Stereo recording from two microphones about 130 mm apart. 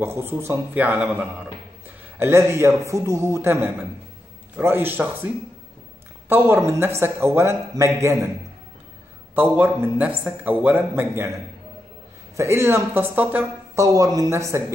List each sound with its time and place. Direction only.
0.0 s a man's voice: 20° right (ahead or behind)
9.3 s a man's voice: 15° right (ahead or behind)
13.7 s a man's voice: 25° right (ahead or behind)